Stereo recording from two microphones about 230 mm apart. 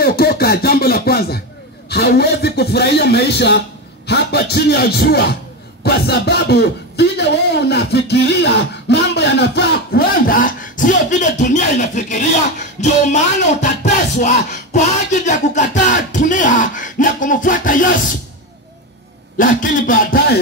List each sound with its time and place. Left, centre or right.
0.0 s a sound: left
1.9 s speech: left
12.8 s music: left
19.3 s music: left